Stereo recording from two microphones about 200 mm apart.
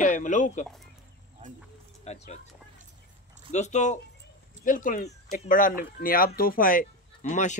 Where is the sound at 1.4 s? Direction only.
25° right (ahead or behind).